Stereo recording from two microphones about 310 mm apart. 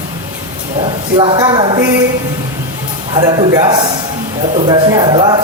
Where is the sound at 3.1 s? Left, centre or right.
Centre.